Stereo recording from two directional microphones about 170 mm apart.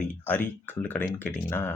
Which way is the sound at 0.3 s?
10° left (ahead or behind).